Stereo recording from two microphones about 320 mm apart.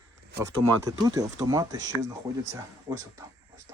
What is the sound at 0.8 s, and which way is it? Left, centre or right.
Speech, centre.